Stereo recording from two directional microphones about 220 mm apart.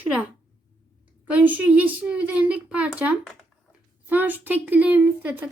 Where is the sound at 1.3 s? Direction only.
5° right (ahead or behind).